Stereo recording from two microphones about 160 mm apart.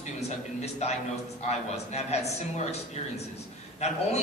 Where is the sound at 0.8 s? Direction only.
40° left (ahead or behind).